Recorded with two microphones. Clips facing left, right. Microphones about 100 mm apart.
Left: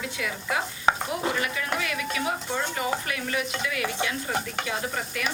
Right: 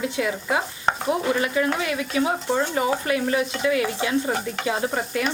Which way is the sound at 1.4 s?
30° right (ahead or behind).